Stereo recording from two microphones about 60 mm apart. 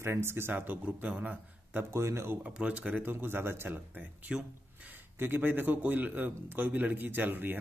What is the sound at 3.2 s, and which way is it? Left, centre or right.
Speech, right.